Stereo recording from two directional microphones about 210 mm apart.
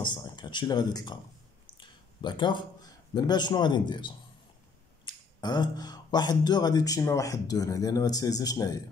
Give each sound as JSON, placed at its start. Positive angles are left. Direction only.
{"t": 0.0, "sound": "speech", "side_deg": 20}
{"t": 1.8, "sound": "a sound", "side_deg": 20}
{"t": 3.2, "sound": "speech", "side_deg": 20}